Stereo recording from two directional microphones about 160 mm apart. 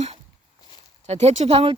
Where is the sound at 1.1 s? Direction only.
40° right (ahead or behind).